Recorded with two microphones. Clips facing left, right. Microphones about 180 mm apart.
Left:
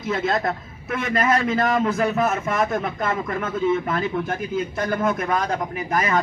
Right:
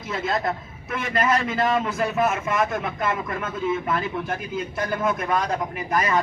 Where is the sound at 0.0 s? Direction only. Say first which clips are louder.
Left 3 dB; centre (ahead or behind).